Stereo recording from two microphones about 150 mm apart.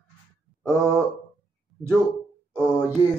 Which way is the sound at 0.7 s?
20° right (ahead or behind).